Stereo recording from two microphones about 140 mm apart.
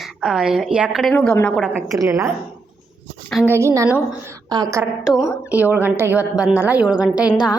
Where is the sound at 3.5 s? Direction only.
20° right (ahead or behind).